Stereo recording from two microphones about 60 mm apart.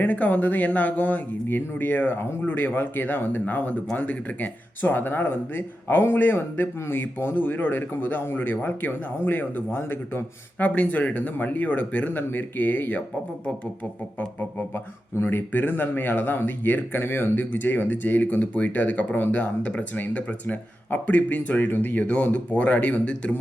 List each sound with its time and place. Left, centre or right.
0.0 s speech: left
10.6 s speech: left
15.2 s speech: left